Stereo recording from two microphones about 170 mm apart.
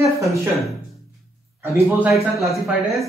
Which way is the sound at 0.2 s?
20° right (ahead or behind).